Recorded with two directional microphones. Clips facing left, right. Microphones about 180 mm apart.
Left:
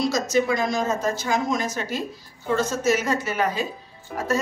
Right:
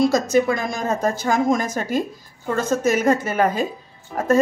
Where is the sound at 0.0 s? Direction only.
55° right (ahead or behind).